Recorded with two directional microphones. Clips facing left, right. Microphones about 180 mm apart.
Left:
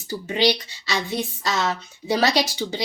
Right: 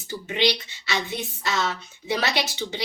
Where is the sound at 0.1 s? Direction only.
35° left (ahead or behind).